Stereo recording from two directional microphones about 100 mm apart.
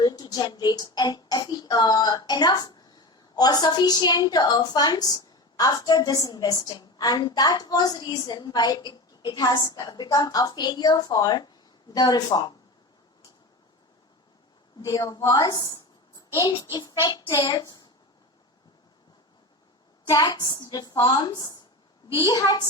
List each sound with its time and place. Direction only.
0.0 s speech: 40° left (ahead or behind)
14.8 s a woman's voice: 40° left (ahead or behind)
20.1 s a woman's voice: 40° left (ahead or behind)